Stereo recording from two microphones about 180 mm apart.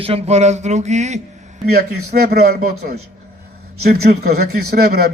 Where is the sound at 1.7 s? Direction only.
60° right (ahead or behind).